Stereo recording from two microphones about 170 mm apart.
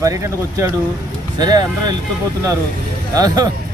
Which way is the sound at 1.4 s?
25° right (ahead or behind).